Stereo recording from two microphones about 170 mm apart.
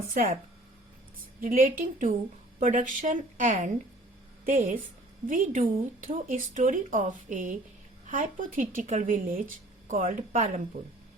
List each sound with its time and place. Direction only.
0.1 s speech: 50° right (ahead or behind)
1.4 s speech: 55° right (ahead or behind)